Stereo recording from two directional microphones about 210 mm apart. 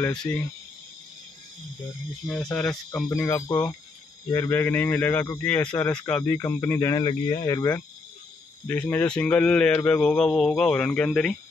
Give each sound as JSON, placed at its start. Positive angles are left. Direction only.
{"t": 0.1, "sound": "a man's voice", "side_deg": 5}
{"t": 2.2, "sound": "a man's voice", "side_deg": 0}
{"t": 2.7, "sound": "speech", "side_deg": 15}
{"t": 8.6, "sound": "a man's voice", "side_deg": 5}